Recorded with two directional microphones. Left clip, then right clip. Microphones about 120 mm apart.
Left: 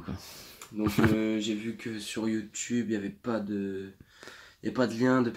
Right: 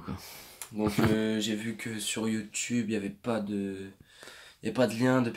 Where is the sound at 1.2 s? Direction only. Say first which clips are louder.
Even; 65° right (ahead or behind).